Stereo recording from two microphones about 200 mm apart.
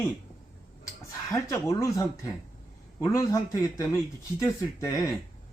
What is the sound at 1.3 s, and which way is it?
Speech, 15° left (ahead or behind).